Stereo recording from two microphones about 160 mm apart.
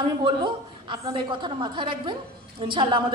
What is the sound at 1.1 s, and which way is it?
A woman's voice, 30° right (ahead or behind).